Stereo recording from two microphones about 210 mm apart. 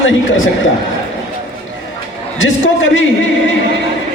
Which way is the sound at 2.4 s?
70° left (ahead or behind).